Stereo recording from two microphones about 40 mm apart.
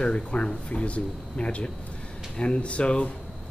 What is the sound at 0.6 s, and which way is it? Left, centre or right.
Speech, left.